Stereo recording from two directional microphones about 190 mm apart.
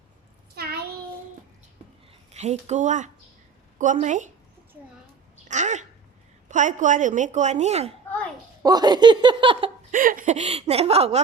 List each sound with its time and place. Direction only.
0.5 s a sound: 55° right (ahead or behind)
2.3 s a woman's voice: 35° right (ahead or behind)
5.5 s a sound: 40° right (ahead or behind)
6.5 s a woman's voice: 40° right (ahead or behind)
8.6 s speech: 20° right (ahead or behind)
9.9 s a woman's voice: 45° right (ahead or behind)